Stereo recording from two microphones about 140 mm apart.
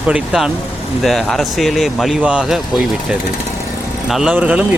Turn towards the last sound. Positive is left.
turn(degrees=-10)  # may be behind; listen again after turning